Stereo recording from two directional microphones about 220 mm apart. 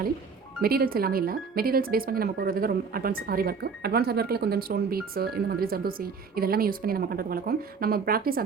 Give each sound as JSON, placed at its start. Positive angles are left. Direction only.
{"t": 0.6, "sound": "speech", "side_deg": -45}